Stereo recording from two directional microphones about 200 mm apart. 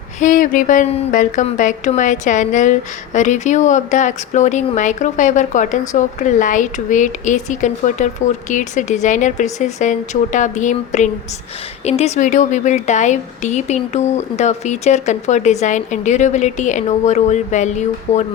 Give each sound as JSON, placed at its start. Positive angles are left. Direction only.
{"t": 0.2, "sound": "a woman's voice", "side_deg": 40}